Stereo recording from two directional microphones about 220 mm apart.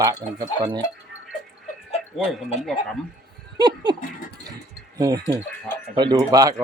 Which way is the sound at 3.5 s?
20° right (ahead or behind).